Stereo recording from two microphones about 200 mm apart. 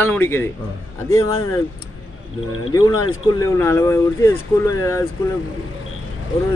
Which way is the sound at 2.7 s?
20° left (ahead or behind).